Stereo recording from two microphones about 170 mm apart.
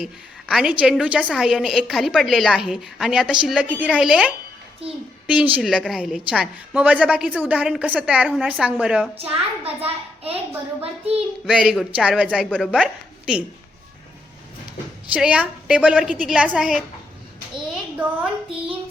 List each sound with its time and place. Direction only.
0.0 s a woman's voice: 5° right (ahead or behind)
9.6 s a child's voice: 35° right (ahead or behind)
10.8 s child singing: 35° right (ahead or behind)
11.4 s a woman's voice: centre (ahead or behind)
15.1 s a woman's voice: 5° right (ahead or behind)
17.9 s a woman's voice: 10° right (ahead or behind)